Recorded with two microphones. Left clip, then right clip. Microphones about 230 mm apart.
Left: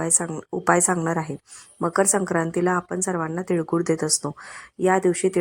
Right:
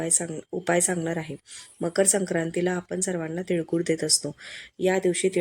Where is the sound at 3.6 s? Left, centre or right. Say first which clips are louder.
Left 3 dB; centre.